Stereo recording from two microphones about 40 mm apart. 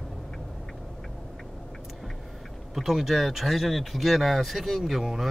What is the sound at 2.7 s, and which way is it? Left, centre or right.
Speech, centre.